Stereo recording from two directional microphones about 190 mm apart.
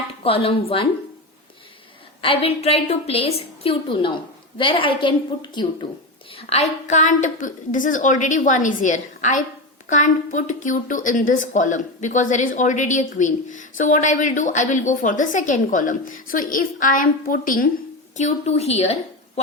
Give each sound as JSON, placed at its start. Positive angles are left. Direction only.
{"t": 0.2, "sound": "speech", "side_deg": 30}
{"t": 2.2, "sound": "a woman's voice", "side_deg": 30}
{"t": 18.2, "sound": "a woman's voice", "side_deg": 35}